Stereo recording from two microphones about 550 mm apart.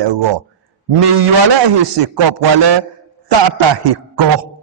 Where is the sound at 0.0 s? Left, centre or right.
Right.